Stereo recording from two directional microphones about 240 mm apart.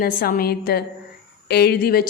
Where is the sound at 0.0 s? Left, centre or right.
Left.